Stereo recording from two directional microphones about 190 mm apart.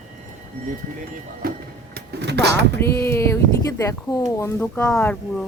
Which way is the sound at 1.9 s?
65° right (ahead or behind).